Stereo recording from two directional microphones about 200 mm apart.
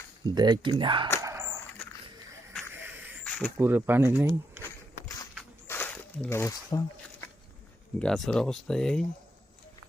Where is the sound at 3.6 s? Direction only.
10° right (ahead or behind).